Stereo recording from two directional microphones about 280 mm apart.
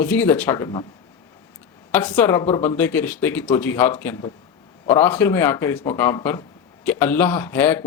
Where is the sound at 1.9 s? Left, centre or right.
Centre.